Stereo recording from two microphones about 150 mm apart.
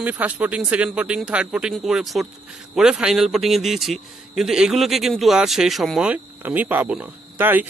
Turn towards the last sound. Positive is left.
turn(degrees=-10)  # may be behind; listen again after turning